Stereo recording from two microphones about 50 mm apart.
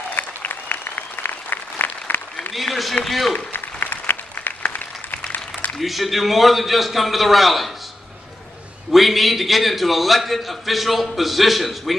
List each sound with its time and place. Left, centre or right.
0.1 s applause: left
2.5 s a man's voice: centre
3.3 s applause: left
5.7 s a man's voice: centre
8.9 s a man's voice: centre